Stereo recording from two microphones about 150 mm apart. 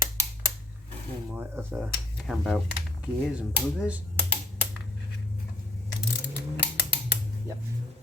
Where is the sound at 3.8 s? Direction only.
10° right (ahead or behind).